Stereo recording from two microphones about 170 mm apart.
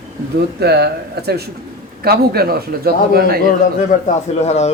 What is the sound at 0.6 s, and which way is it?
A man's voice, 75° right (ahead or behind).